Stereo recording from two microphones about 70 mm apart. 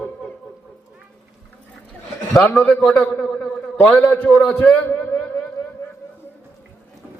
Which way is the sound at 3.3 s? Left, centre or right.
Centre.